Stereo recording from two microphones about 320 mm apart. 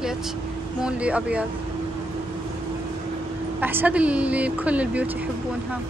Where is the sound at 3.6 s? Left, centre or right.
Centre.